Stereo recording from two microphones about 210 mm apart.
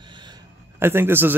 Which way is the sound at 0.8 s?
10° right (ahead or behind).